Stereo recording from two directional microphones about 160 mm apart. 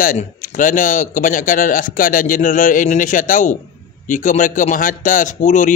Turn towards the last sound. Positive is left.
turn(degrees=50)  # may be behind; listen again after turning